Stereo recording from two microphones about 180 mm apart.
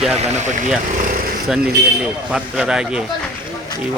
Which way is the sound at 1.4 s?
5° right (ahead or behind).